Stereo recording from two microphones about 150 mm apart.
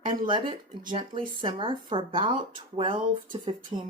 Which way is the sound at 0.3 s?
30° right (ahead or behind).